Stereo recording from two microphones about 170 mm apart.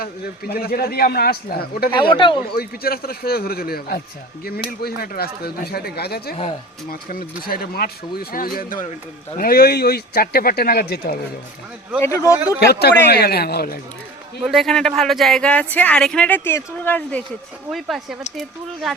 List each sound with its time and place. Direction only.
0.0 s speech: 65° left (ahead or behind)
1.9 s speech: 30° left (ahead or behind)
2.6 s speech: 60° left (ahead or behind)
11.9 s speech: 15° left (ahead or behind)
12.5 s speech: 70° left (ahead or behind)
14.4 s speech: centre (ahead or behind)